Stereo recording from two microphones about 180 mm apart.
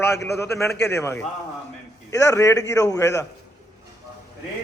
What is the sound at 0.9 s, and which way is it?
Speech, 15° left (ahead or behind).